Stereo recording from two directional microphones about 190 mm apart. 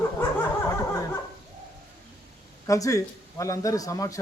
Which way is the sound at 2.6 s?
15° left (ahead or behind).